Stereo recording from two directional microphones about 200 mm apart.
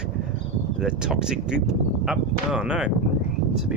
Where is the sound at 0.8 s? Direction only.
5° right (ahead or behind).